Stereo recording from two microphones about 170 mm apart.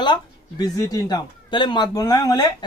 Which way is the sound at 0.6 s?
20° left (ahead or behind).